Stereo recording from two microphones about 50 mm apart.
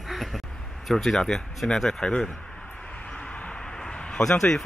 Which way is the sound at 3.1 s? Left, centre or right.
Left.